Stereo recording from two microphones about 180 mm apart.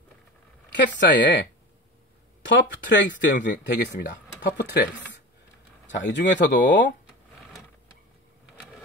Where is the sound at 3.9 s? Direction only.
80° left.